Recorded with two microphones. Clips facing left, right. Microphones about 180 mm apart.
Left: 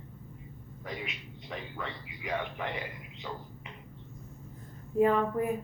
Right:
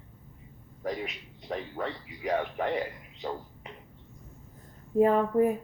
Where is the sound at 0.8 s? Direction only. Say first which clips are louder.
Right 7 dB; 40° right (ahead or behind).